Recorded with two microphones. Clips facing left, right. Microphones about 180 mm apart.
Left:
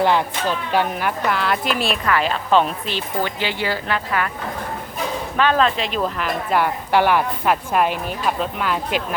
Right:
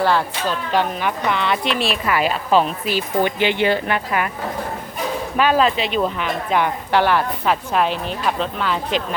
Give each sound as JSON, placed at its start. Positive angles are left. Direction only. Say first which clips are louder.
{"t": 0.0, "sound": "a woman's voice", "louder": "even", "side_deg": 15}
{"t": 3.2, "sound": "speech", "louder": "right 6 dB", "side_deg": -20}
{"t": 5.4, "sound": "a woman's voice", "louder": "right 1 dB", "side_deg": -10}